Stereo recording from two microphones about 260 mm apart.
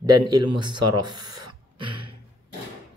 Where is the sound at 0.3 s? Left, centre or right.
Centre.